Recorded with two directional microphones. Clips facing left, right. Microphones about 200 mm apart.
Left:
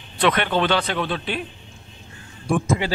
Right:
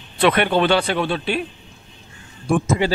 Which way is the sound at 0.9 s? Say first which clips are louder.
Right 3 dB; 30° right (ahead or behind).